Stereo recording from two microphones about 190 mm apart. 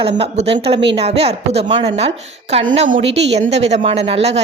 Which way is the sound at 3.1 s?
70° right (ahead or behind).